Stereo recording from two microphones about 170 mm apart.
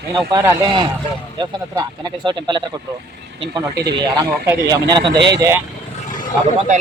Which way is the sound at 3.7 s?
75° right (ahead or behind).